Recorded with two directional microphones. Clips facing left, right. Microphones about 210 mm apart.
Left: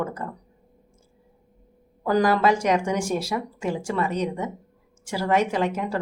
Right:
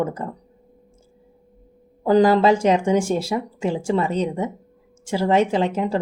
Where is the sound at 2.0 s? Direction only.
25° right (ahead or behind).